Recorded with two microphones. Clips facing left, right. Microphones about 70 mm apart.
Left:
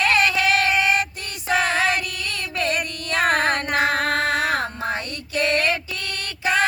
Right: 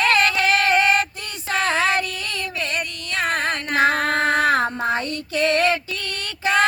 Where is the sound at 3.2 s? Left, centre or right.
Left.